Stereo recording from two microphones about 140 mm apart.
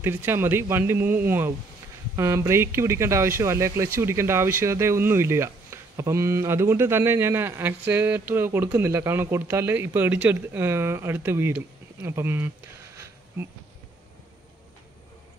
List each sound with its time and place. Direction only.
0.0 s speech: 15° right (ahead or behind)